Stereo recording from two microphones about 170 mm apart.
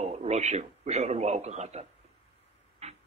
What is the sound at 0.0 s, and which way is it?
A man's voice, 40° right (ahead or behind).